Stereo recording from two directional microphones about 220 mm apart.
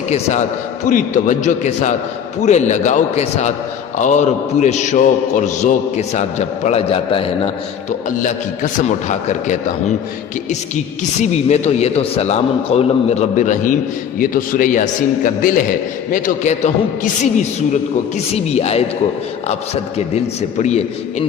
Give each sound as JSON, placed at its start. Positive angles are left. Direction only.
{"t": 0.1, "sound": "a man's voice", "side_deg": 30}
{"t": 11.2, "sound": "a man's voice", "side_deg": 30}
{"t": 18.3, "sound": "a man's voice", "side_deg": 30}
{"t": 20.6, "sound": "a man's voice", "side_deg": 30}